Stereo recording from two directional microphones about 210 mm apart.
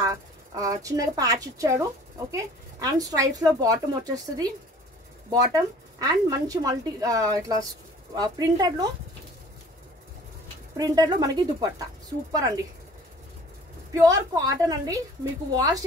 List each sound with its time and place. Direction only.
0.0 s speech: 15° right (ahead or behind)
10.8 s speech: 20° right (ahead or behind)
13.9 s speech: 15° right (ahead or behind)